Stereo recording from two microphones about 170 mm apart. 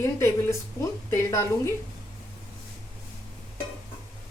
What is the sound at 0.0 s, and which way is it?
Speech, 15° left (ahead or behind).